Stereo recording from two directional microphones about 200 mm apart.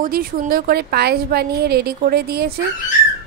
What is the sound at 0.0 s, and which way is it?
A woman's voice, 45° right (ahead or behind).